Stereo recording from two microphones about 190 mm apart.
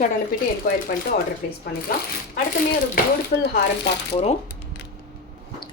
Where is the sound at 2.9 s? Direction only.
55° left (ahead or behind).